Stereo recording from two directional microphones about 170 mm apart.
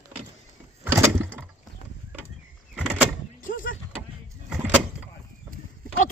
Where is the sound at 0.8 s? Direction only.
15° right (ahead or behind).